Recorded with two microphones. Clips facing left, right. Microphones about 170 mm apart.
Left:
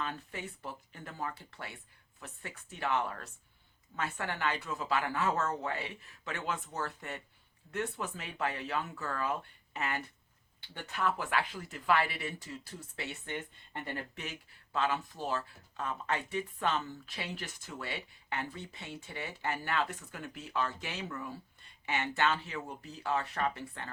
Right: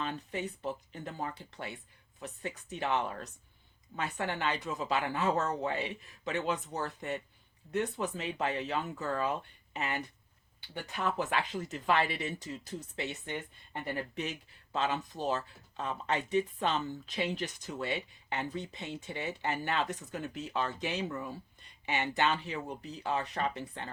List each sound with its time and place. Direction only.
0.0 s speech: 20° right (ahead or behind)